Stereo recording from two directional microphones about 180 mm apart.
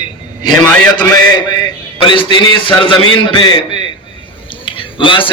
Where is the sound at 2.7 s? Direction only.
25° left (ahead or behind).